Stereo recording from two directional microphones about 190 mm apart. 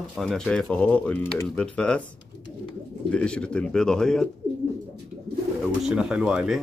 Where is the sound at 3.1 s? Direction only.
5° left (ahead or behind).